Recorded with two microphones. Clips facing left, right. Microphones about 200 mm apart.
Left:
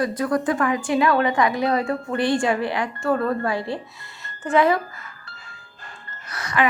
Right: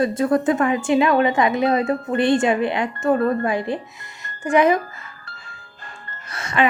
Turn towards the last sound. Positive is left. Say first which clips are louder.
# right 2 dB
turn(degrees=-25)  # may be behind; listen again after turning